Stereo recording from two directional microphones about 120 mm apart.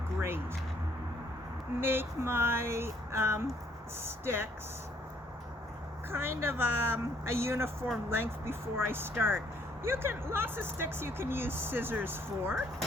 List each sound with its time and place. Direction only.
0.2 s speech: 20° right (ahead or behind)
1.8 s speech: 20° right (ahead or behind)
6.1 s speech: 20° right (ahead or behind)